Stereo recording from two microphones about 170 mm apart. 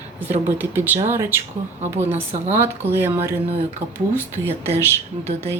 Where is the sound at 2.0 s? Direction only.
40° right (ahead or behind).